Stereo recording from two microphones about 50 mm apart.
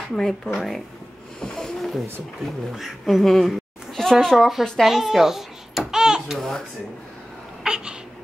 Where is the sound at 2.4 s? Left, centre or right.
Centre.